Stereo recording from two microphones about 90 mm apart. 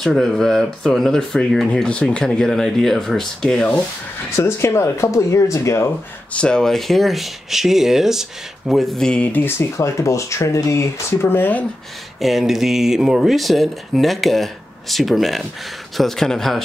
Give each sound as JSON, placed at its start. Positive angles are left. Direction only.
{"t": 0.0, "sound": "speech", "side_deg": 5}
{"t": 4.4, "sound": "speech", "side_deg": 30}
{"t": 6.3, "sound": "speech", "side_deg": 10}
{"t": 9.3, "sound": "speech", "side_deg": 25}
{"t": 12.2, "sound": "speech", "side_deg": 0}